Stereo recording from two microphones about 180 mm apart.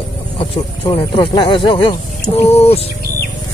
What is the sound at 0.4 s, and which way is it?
Speech, 30° left (ahead or behind).